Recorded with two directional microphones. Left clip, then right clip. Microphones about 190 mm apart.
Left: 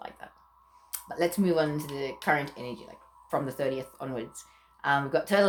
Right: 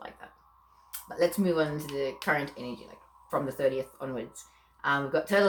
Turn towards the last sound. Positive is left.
turn(degrees=45)  # may be behind; listen again after turning